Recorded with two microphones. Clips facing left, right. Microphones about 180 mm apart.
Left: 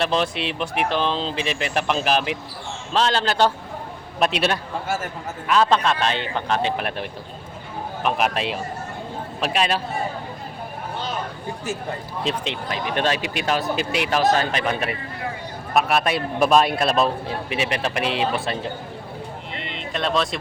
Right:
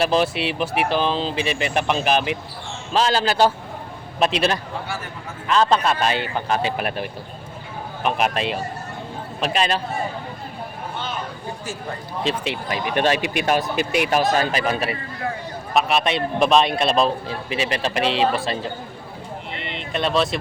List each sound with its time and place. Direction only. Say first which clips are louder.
0.0 s speech: right 3 dB; 5° right (ahead or behind)
12.2 s speech: right 2 dB; 5° right (ahead or behind)
13.1 s speech: right 3 dB; 55° right (ahead or behind)
14.1 s speech: left 3 dB; 10° right (ahead or behind)
15.7 s speech: even; 5° left (ahead or behind)
19.5 s music: right 2 dB; centre (ahead or behind)